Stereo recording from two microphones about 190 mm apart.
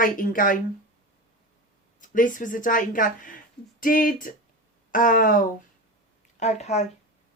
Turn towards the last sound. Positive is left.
turn(degrees=35)  # may be behind; listen again after turning